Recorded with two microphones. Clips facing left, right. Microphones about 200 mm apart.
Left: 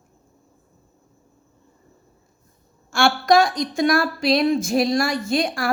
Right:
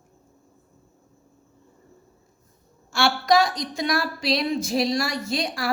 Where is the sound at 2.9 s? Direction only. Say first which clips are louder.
Left 3 dB; 50° left (ahead or behind).